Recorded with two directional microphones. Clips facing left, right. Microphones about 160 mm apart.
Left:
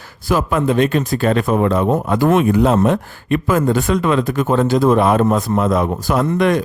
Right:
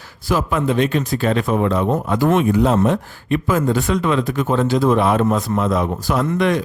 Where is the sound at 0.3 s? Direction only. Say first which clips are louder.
Left 2 dB; 50° left (ahead or behind).